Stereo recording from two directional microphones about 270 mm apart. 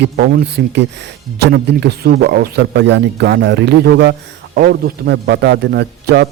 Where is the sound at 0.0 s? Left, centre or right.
Right.